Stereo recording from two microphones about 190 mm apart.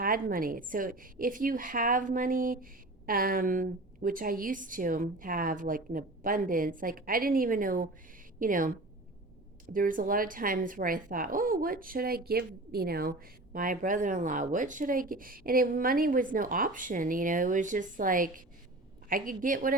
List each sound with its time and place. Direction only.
0.0 s speech: 50° right (ahead or behind)
9.7 s speech: 45° right (ahead or behind)